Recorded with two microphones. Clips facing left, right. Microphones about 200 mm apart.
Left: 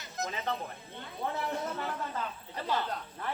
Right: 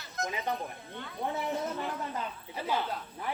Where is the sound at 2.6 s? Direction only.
10° right (ahead or behind).